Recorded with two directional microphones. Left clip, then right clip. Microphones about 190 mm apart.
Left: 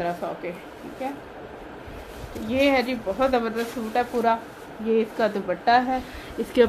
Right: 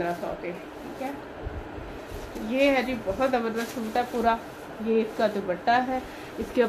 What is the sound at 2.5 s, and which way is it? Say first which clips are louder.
A woman's voice: left 2 dB; 45° left (ahead or behind).